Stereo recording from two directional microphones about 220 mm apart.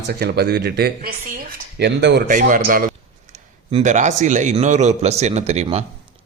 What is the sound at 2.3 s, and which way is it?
A man's voice, 35° right (ahead or behind).